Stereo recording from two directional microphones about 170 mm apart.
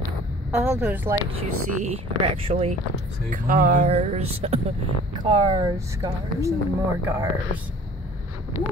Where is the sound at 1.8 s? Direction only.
35° right (ahead or behind).